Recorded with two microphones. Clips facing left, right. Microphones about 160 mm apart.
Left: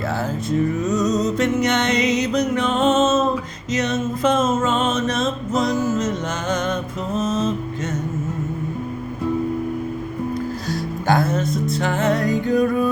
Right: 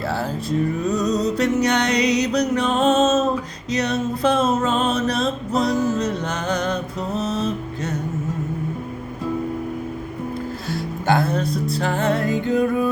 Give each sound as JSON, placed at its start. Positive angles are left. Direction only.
{"t": 0.9, "sound": "music", "side_deg": -35}
{"t": 3.7, "sound": "a sound", "side_deg": -35}
{"t": 6.0, "sound": "music", "side_deg": -35}
{"t": 11.8, "sound": "music", "side_deg": -35}